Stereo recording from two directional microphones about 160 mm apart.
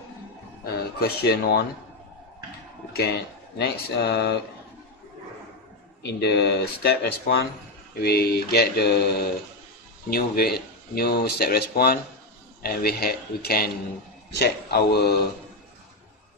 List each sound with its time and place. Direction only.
0.9 s mantra: 80° left
2.9 s speech: 90° left
6.1 s speech: 90° left
8.0 s mantra: 75° left (ahead or behind)
10.0 s speech: 70° left (ahead or behind)
14.4 s speech: 90° left